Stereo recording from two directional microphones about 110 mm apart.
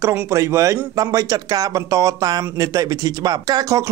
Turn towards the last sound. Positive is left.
turn(degrees=-35)  # may be behind; listen again after turning